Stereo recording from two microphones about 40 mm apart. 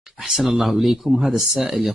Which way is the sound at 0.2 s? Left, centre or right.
Centre.